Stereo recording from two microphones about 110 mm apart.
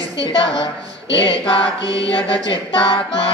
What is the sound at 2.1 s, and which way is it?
Music, 50° left (ahead or behind).